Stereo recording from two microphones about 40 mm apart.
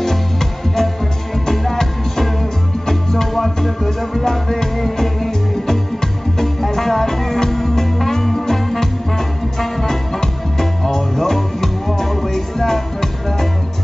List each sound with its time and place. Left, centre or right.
0.0 s music: centre